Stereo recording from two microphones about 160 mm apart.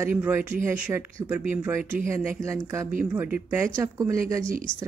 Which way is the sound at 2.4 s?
20° right (ahead or behind).